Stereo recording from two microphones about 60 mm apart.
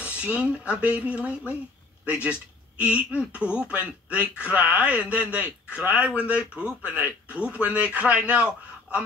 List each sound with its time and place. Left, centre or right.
0.0 s a man's voice: centre